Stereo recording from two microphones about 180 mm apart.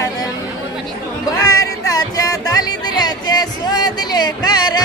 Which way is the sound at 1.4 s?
20° left (ahead or behind).